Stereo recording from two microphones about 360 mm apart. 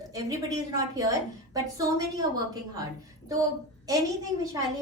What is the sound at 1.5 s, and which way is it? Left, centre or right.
Speech, centre.